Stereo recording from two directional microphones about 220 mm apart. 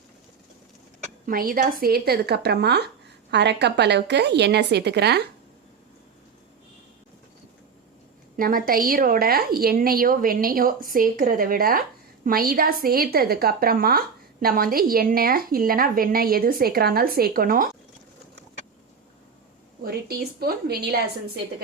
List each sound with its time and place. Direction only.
1.3 s a woman's voice: 40° right (ahead or behind)
8.4 s a woman's voice: 40° right (ahead or behind)
19.8 s a woman's voice: 45° right (ahead or behind)